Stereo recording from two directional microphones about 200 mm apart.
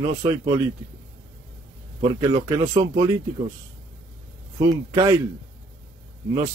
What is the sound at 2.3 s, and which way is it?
Speech, 25° right (ahead or behind).